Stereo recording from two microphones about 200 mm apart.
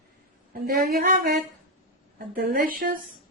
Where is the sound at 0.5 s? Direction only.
50° right (ahead or behind).